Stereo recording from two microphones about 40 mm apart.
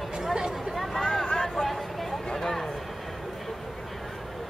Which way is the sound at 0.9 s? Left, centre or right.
Centre.